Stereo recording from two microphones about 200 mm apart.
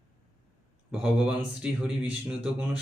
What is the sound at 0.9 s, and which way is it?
A man's voice, 5° right (ahead or behind).